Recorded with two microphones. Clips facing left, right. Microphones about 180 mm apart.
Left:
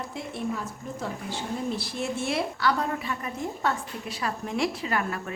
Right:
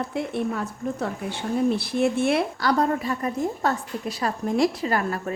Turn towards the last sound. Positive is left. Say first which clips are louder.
# right 4 dB
turn(degrees=-40)  # may be behind; listen again after turning